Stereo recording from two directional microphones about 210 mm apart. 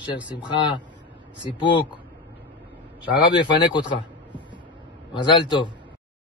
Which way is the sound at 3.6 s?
20° left (ahead or behind).